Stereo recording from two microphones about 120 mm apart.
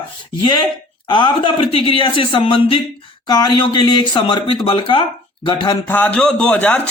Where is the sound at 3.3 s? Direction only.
35° left (ahead or behind).